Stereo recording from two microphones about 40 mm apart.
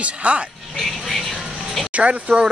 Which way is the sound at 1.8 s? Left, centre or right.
Right.